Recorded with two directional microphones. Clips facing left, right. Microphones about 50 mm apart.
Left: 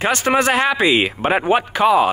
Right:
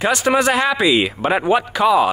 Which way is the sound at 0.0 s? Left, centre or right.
Left.